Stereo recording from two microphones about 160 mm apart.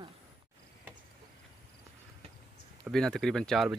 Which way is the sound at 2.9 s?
5° left (ahead or behind).